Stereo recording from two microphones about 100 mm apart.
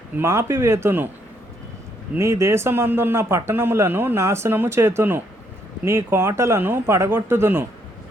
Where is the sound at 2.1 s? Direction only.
30° right (ahead or behind).